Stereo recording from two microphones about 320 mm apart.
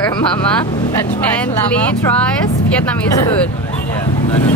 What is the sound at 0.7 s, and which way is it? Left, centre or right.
Speech, centre.